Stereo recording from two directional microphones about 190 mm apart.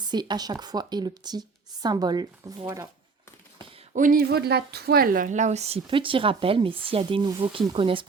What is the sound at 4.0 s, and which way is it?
A woman's voice, 45° right (ahead or behind).